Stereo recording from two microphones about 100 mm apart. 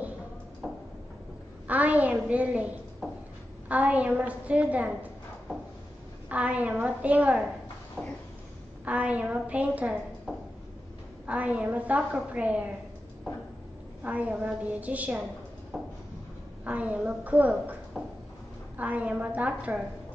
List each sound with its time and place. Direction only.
0.6 s tick-tock: 5° right (ahead or behind)
1.7 s a child's voice: 15° right (ahead or behind)
6.2 s a woman's voice: 15° right (ahead or behind)
8.8 s a woman's voice: 15° right (ahead or behind)
10.3 s a sound: 5° right (ahead or behind)
11.2 s a woman's voice: 15° right (ahead or behind)
14.0 s a woman's voice: 15° right (ahead or behind)
15.7 s a sound: centre (ahead or behind)
16.6 s a woman's voice: 15° right (ahead or behind)